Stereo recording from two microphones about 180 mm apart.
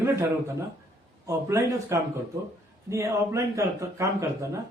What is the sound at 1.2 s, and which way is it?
A man's voice, 15° right (ahead or behind).